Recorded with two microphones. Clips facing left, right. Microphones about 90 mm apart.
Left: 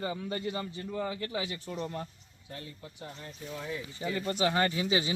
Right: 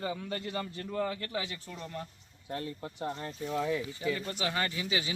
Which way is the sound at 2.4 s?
50° right (ahead or behind).